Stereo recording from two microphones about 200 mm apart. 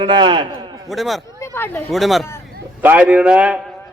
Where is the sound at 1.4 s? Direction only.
10° left (ahead or behind).